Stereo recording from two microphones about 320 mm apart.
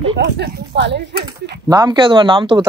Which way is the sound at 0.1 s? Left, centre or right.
Right.